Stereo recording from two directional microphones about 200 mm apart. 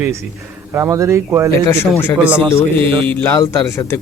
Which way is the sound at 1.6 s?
10° left (ahead or behind).